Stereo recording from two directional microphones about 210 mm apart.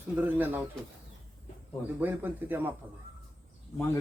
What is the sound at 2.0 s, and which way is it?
Speech, 10° right (ahead or behind).